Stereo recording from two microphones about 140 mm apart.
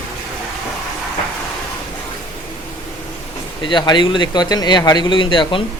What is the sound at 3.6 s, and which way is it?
Speech, 35° left (ahead or behind).